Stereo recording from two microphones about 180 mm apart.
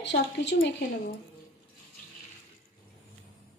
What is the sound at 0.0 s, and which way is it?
A woman's voice, 75° left (ahead or behind).